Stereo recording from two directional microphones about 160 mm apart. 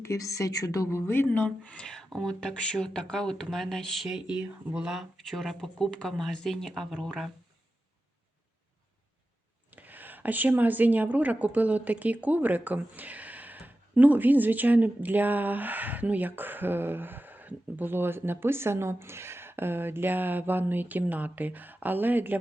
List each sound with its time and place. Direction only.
0.0 s speech: 20° left (ahead or behind); by 7.3 s 5° left (ahead or behind)
9.7 s speech: 10° right (ahead or behind)